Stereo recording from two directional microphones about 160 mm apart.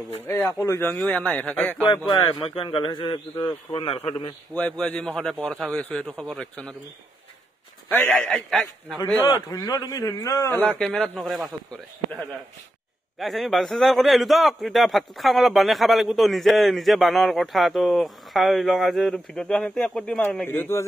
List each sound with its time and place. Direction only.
0.3 s a man's voice: 15° left (ahead or behind)
1.9 s a man's voice: 30° left (ahead or behind)
4.6 s a man's voice: 5° left (ahead or behind)
7.9 s a man's voice: 10° left (ahead or behind)
9.2 s a man's voice: 25° left (ahead or behind)
10.6 s a man's voice: 5° left (ahead or behind)
13.2 s a man's voice: centre (ahead or behind)